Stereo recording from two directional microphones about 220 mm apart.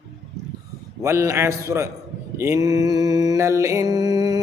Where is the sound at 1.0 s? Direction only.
10° right (ahead or behind).